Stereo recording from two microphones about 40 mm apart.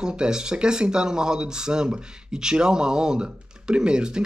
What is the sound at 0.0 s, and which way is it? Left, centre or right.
Speech, centre.